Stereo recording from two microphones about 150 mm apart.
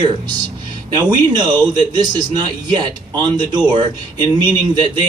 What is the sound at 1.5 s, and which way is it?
Speech, 25° right (ahead or behind).